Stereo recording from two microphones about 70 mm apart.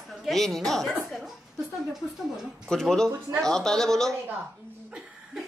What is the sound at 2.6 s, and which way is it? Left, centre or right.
Speech, centre.